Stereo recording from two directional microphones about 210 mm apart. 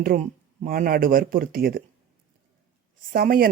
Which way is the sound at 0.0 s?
40° right (ahead or behind).